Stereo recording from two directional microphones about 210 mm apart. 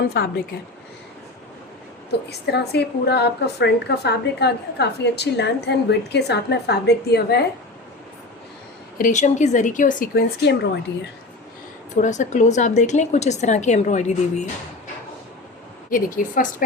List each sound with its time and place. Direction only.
0.1 s a woman's voice: 45° left (ahead or behind)
2.0 s a woman's voice: 50° left (ahead or behind)
9.0 s a woman's voice: 35° left (ahead or behind); by 11.1 s 55° left (ahead or behind)
11.9 s a woman's voice: 35° left (ahead or behind)
15.9 s a woman's voice: 40° left (ahead or behind)